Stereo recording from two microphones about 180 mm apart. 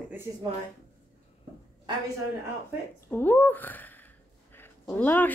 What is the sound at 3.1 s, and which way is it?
Speech, 10° left (ahead or behind).